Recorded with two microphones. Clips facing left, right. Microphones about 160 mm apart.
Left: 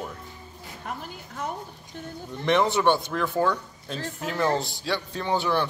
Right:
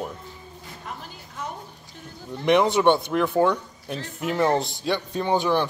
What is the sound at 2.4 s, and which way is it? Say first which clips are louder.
Speech: right 3 dB; 15° right (ahead or behind).